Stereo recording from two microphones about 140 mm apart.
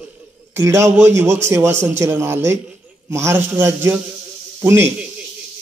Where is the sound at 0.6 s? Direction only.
20° right (ahead or behind).